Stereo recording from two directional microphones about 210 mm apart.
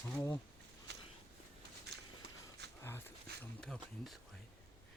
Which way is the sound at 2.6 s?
55° right (ahead or behind).